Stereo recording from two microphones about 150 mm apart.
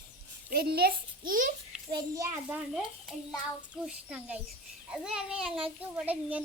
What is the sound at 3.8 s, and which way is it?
A child's voice, 5° right (ahead or behind).